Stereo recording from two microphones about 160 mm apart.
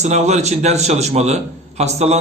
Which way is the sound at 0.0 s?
45° right (ahead or behind).